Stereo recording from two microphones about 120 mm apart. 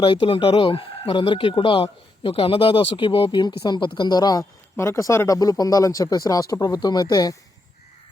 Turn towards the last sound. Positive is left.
turn(degrees=35)  # may be behind; listen again after turning